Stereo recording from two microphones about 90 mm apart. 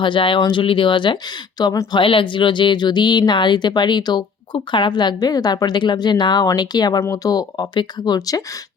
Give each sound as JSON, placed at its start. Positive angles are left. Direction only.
{"t": 0.0, "sound": "a woman's voice", "side_deg": 65}
{"t": 1.9, "sound": "a woman's voice", "side_deg": 70}
{"t": 7.0, "sound": "speech", "side_deg": 40}